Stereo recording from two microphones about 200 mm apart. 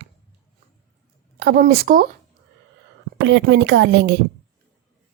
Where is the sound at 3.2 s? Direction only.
65° right (ahead or behind).